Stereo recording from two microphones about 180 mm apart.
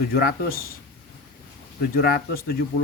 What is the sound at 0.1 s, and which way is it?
Speech, 55° left (ahead or behind).